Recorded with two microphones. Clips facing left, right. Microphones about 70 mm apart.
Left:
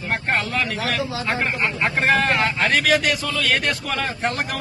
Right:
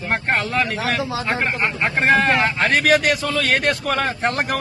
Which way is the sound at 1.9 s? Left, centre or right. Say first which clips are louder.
Right 3 dB; right.